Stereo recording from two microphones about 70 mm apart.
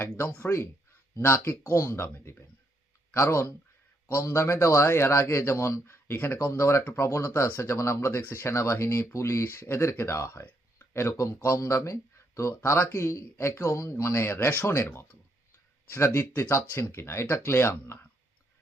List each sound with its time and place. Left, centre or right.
0.5 s speech: left
4.4 s speech: left
6.5 s speech: left
10.4 s a sound: left
11.4 s speech: left
12.5 s speech: left
14.8 s speech: left
15.9 s speech: left
16.7 s speech: left